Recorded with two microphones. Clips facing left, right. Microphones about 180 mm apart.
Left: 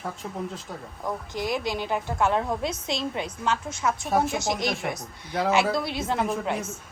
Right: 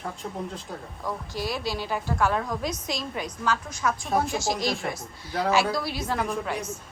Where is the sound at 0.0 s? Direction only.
Centre (ahead or behind).